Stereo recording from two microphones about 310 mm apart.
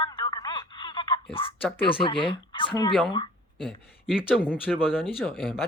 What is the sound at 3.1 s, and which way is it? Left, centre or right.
Speech, centre.